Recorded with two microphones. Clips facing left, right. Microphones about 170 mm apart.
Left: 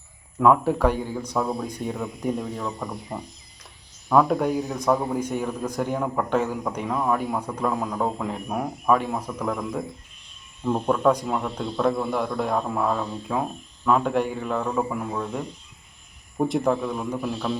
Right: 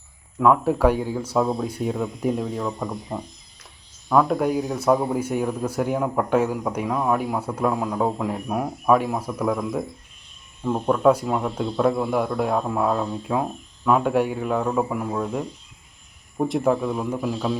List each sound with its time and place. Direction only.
0.3 s a man's voice: centre (ahead or behind); by 3.2 s 20° right (ahead or behind)
4.1 s a man's voice: centre (ahead or behind)